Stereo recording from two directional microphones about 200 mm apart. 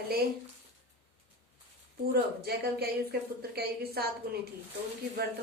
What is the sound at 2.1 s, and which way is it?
A woman's voice, 50° right (ahead or behind).